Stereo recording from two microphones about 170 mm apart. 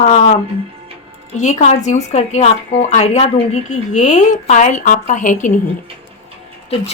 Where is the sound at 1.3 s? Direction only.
45° left (ahead or behind).